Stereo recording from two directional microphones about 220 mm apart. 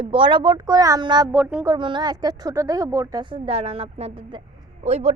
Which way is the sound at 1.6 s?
20° right (ahead or behind).